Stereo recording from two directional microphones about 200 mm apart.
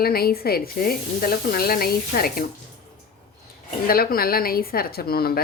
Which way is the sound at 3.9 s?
50° left (ahead or behind).